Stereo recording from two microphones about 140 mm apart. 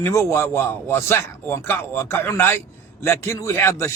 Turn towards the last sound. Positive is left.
turn(degrees=20)  # may be behind; listen again after turning